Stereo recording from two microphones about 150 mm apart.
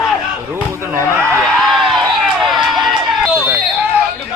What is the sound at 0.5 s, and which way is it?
Speech, 15° right (ahead or behind).